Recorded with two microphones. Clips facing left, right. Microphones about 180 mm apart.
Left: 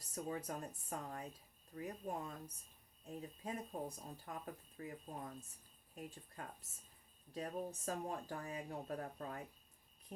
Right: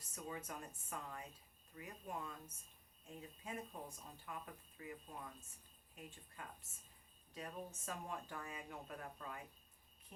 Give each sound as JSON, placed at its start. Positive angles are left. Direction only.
{"t": 0.1, "sound": "speech", "side_deg": 35}